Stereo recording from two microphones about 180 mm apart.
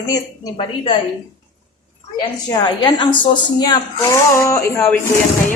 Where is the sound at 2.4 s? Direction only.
25° left (ahead or behind).